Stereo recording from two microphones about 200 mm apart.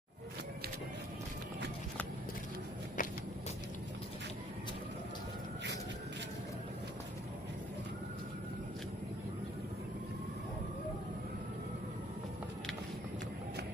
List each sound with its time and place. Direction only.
3.0 s walk: 40° left (ahead or behind)